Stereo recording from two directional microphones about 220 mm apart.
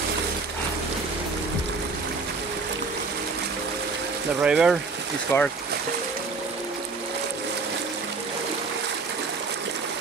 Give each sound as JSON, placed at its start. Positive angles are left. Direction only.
{"t": 4.4, "sound": "speech", "side_deg": -5}
{"t": 5.3, "sound": "speech", "side_deg": 10}